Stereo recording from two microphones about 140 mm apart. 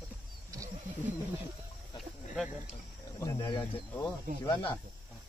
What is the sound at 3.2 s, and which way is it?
Speech, 25° left (ahead or behind).